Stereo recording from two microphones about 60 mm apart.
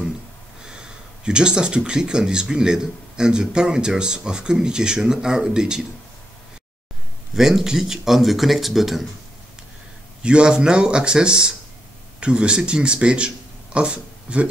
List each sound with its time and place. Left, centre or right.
1.2 s a man's voice: centre
7.3 s speech: centre
10.2 s a man's voice: centre